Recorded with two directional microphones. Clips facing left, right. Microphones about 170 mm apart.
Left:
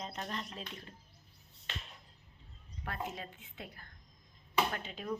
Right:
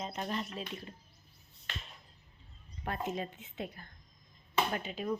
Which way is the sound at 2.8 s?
20° right (ahead or behind).